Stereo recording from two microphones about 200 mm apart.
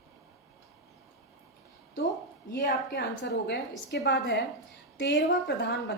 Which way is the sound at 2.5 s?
60° left (ahead or behind).